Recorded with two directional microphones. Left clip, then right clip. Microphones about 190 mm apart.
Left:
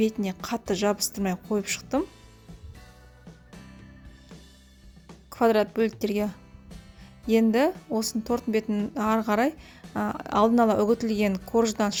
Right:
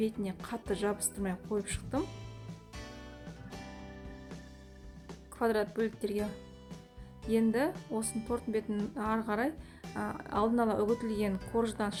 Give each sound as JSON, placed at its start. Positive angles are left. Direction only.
{"t": 0.0, "sound": "speech", "side_deg": 40}
{"t": 5.3, "sound": "speech", "side_deg": 40}
{"t": 7.3, "sound": "speech", "side_deg": 40}